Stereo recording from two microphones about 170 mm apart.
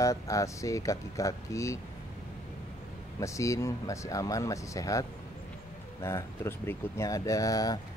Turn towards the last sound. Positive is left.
turn(degrees=20)  # may be behind; listen again after turning